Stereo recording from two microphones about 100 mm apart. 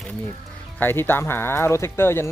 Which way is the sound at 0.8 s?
20° left (ahead or behind).